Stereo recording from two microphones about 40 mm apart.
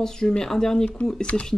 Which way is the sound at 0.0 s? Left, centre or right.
Centre.